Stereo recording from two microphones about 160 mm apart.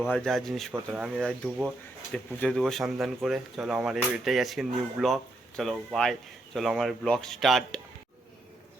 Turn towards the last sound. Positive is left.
turn(degrees=0)  # may be behind; listen again after turning